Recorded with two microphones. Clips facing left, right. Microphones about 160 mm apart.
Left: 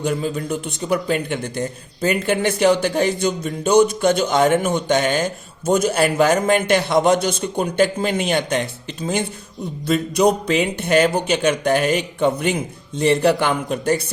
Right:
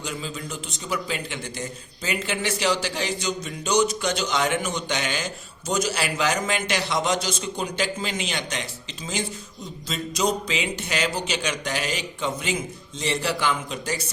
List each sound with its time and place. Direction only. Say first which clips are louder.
0.0 s a man's voice: left 10 dB; 55° left (ahead or behind)